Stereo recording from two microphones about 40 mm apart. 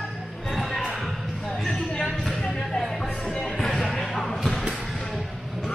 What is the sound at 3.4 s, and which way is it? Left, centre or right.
Music, centre.